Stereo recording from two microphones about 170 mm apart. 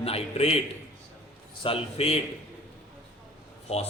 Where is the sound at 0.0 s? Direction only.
35° left (ahead or behind).